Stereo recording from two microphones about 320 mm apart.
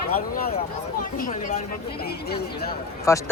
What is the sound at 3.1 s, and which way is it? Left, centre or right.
Speech, centre.